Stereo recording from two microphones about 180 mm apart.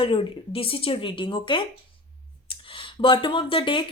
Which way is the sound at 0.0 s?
30° left (ahead or behind).